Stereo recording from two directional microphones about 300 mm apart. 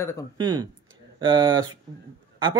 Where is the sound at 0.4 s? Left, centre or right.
Centre.